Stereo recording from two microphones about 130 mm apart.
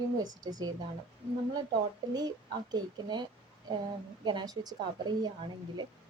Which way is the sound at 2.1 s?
30° right (ahead or behind).